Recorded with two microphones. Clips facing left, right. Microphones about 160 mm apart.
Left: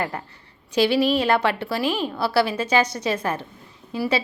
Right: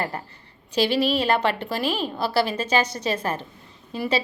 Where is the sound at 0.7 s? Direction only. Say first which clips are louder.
Left 2 dB; 15° left (ahead or behind).